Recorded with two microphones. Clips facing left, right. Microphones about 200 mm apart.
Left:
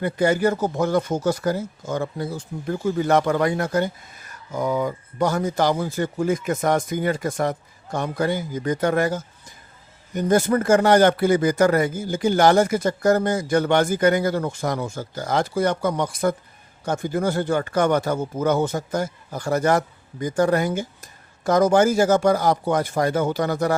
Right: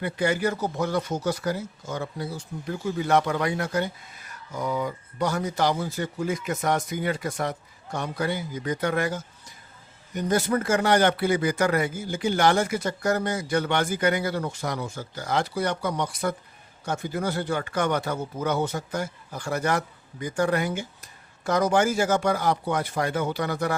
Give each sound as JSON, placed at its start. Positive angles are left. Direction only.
{"t": 0.0, "sound": "speech", "side_deg": 45}